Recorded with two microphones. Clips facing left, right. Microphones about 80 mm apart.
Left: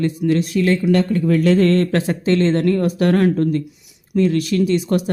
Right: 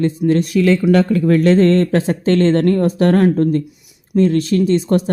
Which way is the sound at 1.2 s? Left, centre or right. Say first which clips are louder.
Right 2 dB; right.